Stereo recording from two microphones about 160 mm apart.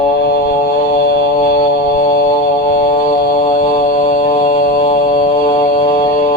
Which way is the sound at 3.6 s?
60° left (ahead or behind).